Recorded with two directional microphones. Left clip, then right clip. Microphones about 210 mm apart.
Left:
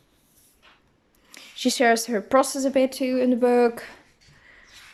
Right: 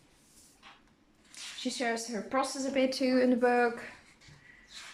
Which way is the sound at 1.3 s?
45° left (ahead or behind).